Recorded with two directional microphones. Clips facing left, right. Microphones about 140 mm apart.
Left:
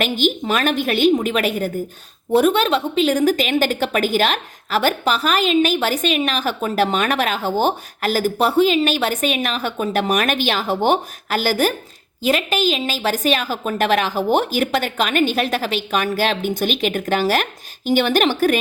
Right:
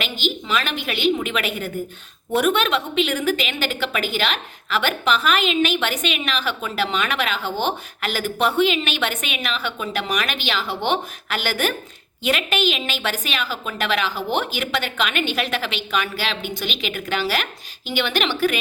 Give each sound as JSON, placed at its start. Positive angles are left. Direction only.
{"t": 0.0, "sound": "a woman's voice", "side_deg": 50}